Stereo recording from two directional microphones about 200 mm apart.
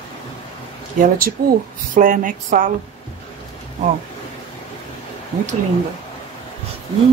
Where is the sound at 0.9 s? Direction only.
40° right (ahead or behind).